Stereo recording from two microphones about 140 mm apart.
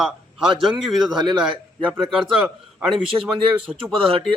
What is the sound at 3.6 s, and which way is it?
Speech, 40° right (ahead or behind).